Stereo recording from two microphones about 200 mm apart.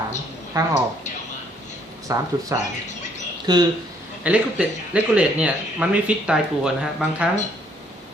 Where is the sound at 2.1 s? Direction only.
15° right (ahead or behind).